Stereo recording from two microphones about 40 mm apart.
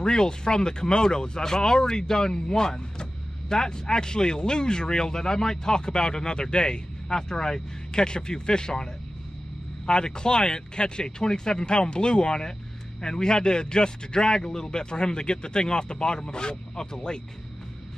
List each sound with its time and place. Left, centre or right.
0.0 s speech: centre
9.8 s speech: centre